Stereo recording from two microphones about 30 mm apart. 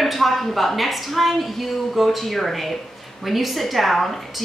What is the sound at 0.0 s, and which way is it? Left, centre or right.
A woman's voice, centre.